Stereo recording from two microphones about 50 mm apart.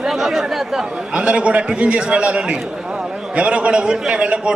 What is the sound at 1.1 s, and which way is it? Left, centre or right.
A man's voice, right.